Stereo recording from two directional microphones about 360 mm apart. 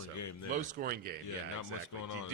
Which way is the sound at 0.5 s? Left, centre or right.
Right.